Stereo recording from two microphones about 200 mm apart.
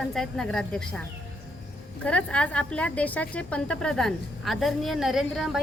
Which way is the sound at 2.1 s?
5° left (ahead or behind).